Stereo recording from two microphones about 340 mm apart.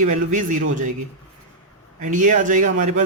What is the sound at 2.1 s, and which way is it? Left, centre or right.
Speech, right.